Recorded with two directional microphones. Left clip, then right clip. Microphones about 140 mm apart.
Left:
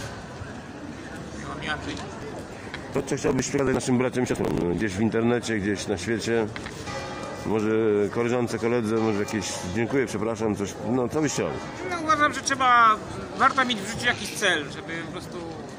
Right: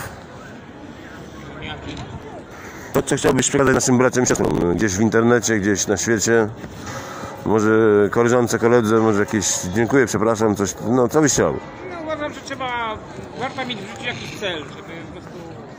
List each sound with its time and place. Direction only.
2.9 s speech: 35° right (ahead or behind)
7.6 s speech: 35° right (ahead or behind)
11.9 s a sound: 30° left (ahead or behind)
13.4 s speech: 35° left (ahead or behind)